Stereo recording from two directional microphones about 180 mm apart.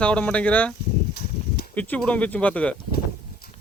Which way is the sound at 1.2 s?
60° left (ahead or behind).